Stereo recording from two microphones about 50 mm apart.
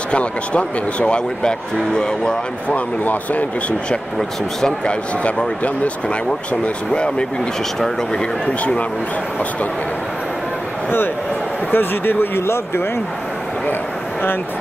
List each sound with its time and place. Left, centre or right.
0.1 s speech: left
2.7 s speech: left
4.2 s speech: centre
4.8 s speech: left
11.7 s speech: left